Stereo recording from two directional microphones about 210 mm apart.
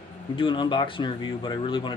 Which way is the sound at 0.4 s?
25° left (ahead or behind).